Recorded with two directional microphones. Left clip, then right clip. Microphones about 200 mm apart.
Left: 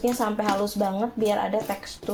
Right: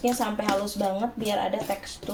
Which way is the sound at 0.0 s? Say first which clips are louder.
Left 2 dB; 25° left (ahead or behind).